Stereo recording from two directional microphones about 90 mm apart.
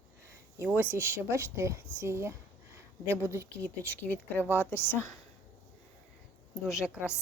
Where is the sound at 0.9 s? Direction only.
30° right (ahead or behind).